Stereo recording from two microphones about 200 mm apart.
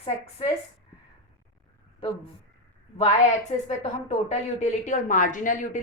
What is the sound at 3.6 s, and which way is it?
A woman's voice, 35° left (ahead or behind).